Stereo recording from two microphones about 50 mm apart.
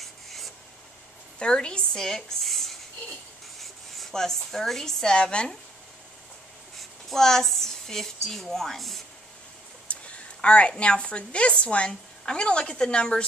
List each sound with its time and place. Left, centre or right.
0.0 s rub: centre
1.4 s speech: centre
6.8 s a woman's voice: centre
9.8 s a sound: left
10.8 s speech: left